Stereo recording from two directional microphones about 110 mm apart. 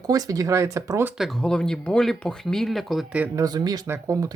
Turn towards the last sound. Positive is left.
turn(degrees=-20)  # may be behind; listen again after turning